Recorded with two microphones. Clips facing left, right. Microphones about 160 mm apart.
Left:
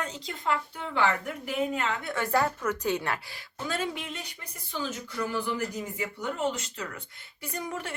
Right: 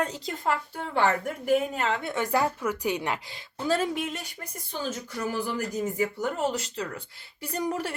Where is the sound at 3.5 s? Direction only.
30° right (ahead or behind).